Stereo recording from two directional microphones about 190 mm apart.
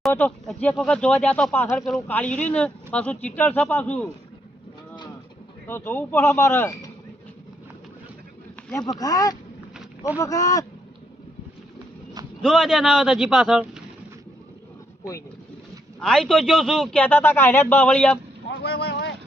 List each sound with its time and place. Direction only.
0.1 s speech: 5° left (ahead or behind)
5.6 s speech: 10° left (ahead or behind)
8.7 s speech: 20° left (ahead or behind)
12.4 s a man's voice: centre (ahead or behind)
16.0 s a man's voice: 5° left (ahead or behind)
18.4 s vehicle: 60° left (ahead or behind)